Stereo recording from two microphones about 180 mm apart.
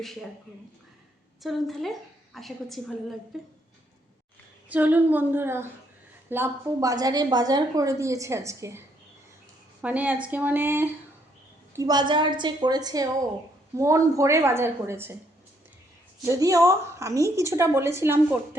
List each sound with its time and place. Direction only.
0.0 s a woman's voice: centre (ahead or behind)
1.4 s a woman's voice: centre (ahead or behind)
4.7 s a woman's voice: 10° right (ahead or behind)
9.8 s a woman's voice: 10° right (ahead or behind)
16.2 s a woman's voice: 15° right (ahead or behind)